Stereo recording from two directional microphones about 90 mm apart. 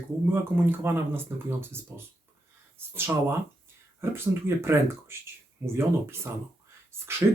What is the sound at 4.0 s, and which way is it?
Speech, 30° right (ahead or behind).